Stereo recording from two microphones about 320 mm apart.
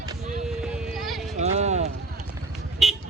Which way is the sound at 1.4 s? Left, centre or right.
Right.